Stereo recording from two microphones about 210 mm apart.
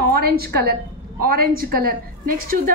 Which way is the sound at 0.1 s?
45° right (ahead or behind).